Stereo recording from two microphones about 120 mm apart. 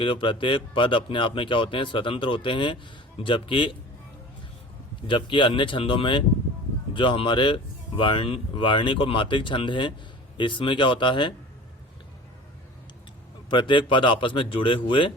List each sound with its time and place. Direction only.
0.0 s speech: 45° left (ahead or behind)
5.0 s speech: 40° left (ahead or behind)
13.5 s speech: 40° left (ahead or behind)